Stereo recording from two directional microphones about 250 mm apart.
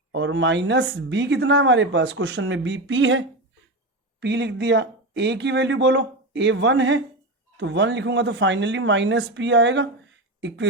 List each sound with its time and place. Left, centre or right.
0.1 s speech: right